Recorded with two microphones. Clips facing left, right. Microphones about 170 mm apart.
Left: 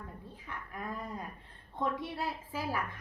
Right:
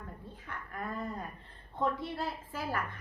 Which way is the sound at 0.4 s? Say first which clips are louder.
Right 1 dB; 10° left (ahead or behind).